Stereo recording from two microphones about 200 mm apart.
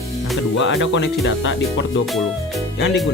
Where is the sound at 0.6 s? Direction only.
65° left (ahead or behind).